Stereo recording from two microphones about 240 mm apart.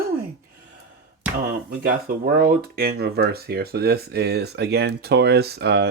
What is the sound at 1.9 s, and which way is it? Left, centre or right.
Speech, right.